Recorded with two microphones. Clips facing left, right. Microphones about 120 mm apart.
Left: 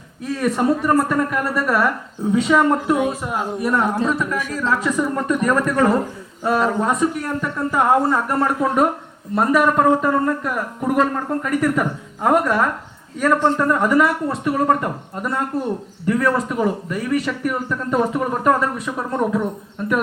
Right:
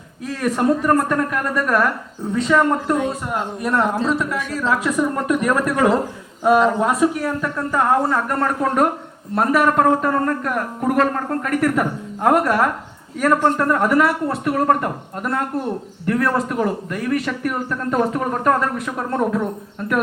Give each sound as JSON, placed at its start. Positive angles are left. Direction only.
{"t": 0.3, "sound": "a man's voice", "side_deg": 0}
{"t": 4.5, "sound": "speech", "side_deg": -5}